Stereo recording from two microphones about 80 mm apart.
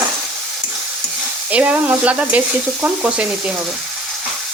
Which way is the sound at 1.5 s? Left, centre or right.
Centre.